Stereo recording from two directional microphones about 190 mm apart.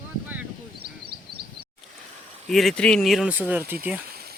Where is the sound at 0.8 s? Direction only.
55° right (ahead or behind).